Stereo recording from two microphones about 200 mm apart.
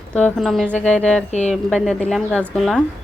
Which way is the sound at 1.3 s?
35° left (ahead or behind).